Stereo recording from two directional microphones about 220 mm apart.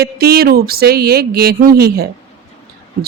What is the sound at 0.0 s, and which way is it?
Speech, 45° right (ahead or behind).